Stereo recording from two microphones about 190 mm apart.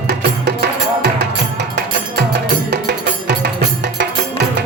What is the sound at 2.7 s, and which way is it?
Music, 55° right (ahead or behind).